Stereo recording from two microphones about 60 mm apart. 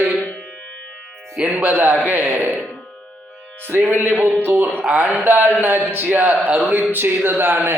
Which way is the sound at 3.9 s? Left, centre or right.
Right.